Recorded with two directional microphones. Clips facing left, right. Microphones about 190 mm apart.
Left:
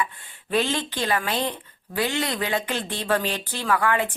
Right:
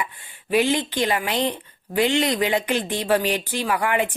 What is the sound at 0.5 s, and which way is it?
A woman's voice, 15° right (ahead or behind).